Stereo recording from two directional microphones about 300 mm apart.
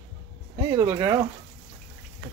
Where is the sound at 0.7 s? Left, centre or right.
Centre.